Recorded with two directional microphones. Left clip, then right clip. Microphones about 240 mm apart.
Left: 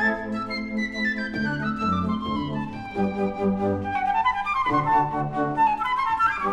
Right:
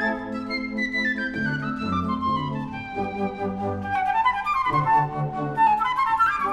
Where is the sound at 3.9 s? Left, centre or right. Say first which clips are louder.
Right 2 dB; right.